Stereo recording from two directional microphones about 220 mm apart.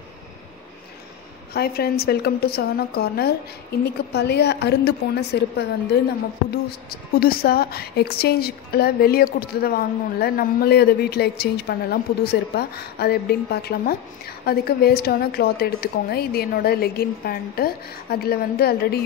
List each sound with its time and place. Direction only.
1.5 s a woman's voice: 45° left (ahead or behind)